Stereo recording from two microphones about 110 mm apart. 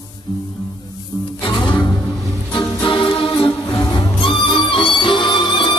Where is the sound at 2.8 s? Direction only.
50° left (ahead or behind).